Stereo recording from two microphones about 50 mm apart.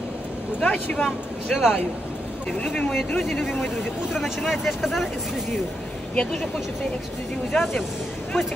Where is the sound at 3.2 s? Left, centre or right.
Centre.